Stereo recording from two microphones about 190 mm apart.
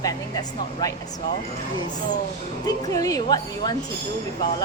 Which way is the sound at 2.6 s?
20° left (ahead or behind).